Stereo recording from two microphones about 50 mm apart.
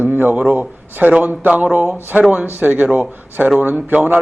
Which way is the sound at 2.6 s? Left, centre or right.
Right.